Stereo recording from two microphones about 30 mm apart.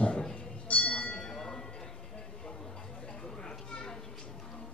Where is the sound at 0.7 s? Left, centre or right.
Left.